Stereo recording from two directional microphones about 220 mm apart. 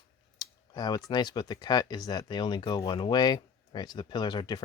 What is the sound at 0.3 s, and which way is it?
Speech, 20° left (ahead or behind).